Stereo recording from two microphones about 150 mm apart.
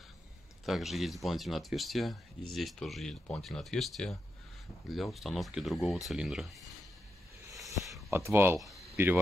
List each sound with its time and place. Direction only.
0.7 s speech: centre (ahead or behind)
8.1 s speech: 15° right (ahead or behind)
8.5 s speech: centre (ahead or behind)
8.9 s speech: 15° right (ahead or behind)